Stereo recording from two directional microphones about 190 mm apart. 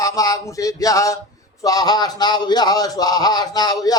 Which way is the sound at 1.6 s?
20° left (ahead or behind).